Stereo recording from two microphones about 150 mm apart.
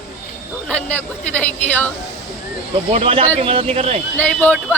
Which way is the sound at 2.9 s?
40° right (ahead or behind).